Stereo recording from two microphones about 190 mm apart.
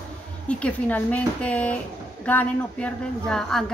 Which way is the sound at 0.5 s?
5° left (ahead or behind).